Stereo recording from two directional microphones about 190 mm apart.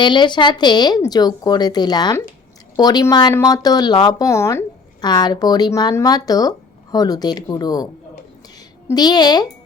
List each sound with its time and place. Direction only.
0.0 s speech: 25° left (ahead or behind)
8.9 s speech: 20° left (ahead or behind)